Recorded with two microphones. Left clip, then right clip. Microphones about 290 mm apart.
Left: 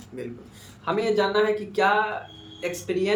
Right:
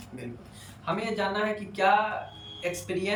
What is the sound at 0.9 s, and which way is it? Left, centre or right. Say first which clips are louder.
Speech: left 8 dB; centre.